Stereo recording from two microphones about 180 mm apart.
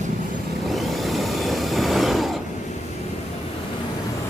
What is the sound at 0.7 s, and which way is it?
Vehicle, centre (ahead or behind).